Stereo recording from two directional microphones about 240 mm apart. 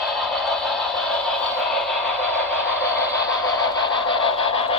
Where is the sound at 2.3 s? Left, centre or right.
Centre.